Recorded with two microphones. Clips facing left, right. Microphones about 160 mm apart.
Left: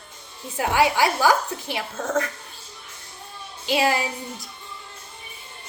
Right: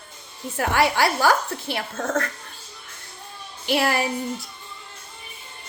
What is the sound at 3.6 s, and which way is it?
Speech, 15° left (ahead or behind).